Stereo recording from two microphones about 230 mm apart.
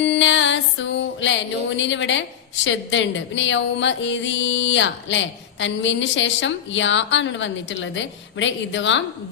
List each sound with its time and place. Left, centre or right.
0.0 s music: left
2.6 s speech: left